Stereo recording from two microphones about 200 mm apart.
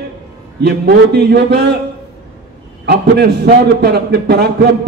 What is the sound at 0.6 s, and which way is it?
A man's voice, 55° right (ahead or behind).